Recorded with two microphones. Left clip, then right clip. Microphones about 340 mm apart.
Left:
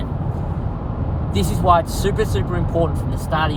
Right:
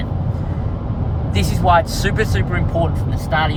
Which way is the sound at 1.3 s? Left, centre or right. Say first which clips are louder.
Right 1 dB; right.